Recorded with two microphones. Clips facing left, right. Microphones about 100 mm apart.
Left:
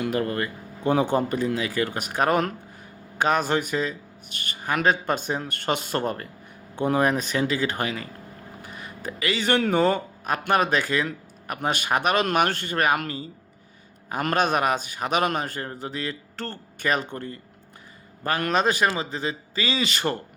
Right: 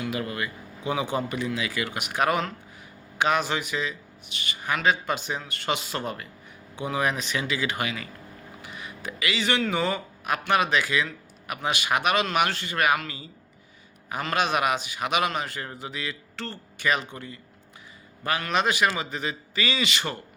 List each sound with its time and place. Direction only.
0.0 s a man's voice: 45° left (ahead or behind)